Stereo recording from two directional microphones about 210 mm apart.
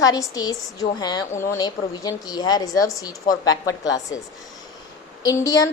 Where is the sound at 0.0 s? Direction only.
15° left (ahead or behind).